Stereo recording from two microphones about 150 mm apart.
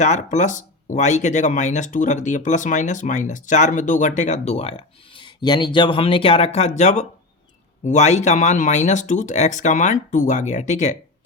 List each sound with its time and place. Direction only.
0.0 s speech: 55° left (ahead or behind)